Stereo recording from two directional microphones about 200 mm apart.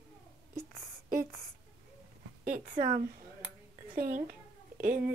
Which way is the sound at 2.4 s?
40° right (ahead or behind).